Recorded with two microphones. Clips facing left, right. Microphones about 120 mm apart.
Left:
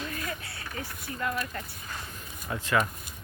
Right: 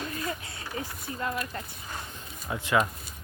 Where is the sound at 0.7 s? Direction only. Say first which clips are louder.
Right 2 dB; 25° right (ahead or behind).